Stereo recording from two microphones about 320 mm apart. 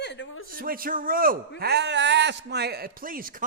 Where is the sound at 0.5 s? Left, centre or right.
Right.